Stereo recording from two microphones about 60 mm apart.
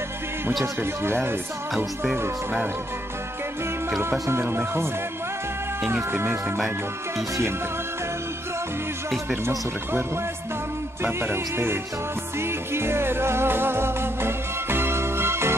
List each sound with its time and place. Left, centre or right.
1.0 s speech: right
4.0 s speech: right
11.1 s speech: right
12.4 s music: right